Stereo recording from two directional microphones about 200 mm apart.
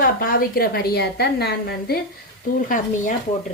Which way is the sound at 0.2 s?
45° left (ahead or behind).